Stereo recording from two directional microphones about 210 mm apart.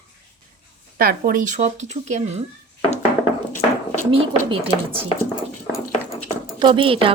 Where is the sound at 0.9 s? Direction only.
45° right (ahead or behind).